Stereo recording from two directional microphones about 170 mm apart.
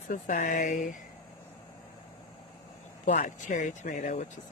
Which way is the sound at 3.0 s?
45° left (ahead or behind).